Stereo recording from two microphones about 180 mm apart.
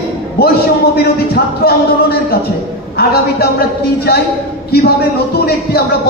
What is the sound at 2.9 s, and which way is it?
A man's voice, 60° left (ahead or behind).